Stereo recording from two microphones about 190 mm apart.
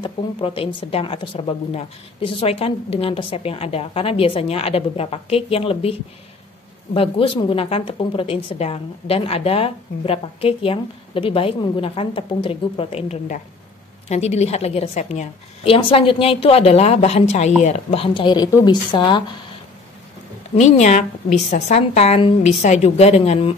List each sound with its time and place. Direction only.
0.0 s a woman's voice: 30° left (ahead or behind)
20.5 s speech: 35° left (ahead or behind)